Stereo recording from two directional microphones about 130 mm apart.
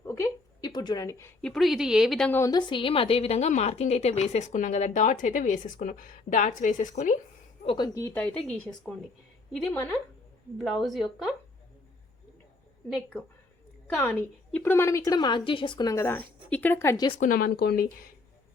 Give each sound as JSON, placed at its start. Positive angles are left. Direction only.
{"t": 0.0, "sound": "a sound", "side_deg": 20}
{"t": 0.7, "sound": "speech", "side_deg": 30}
{"t": 1.4, "sound": "a woman's voice", "side_deg": 5}
{"t": 2.5, "sound": "a woman's voice", "side_deg": 35}
{"t": 7.6, "sound": "a woman's voice", "side_deg": 45}
{"t": 7.9, "sound": "speech", "side_deg": 20}
{"t": 10.6, "sound": "a woman's voice", "side_deg": 0}
{"t": 14.1, "sound": "speech", "side_deg": 15}
{"t": 16.0, "sound": "speech", "side_deg": 15}
{"t": 17.2, "sound": "speech", "side_deg": 90}